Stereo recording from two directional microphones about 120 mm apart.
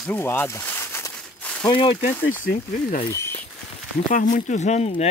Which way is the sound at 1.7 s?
40° left (ahead or behind).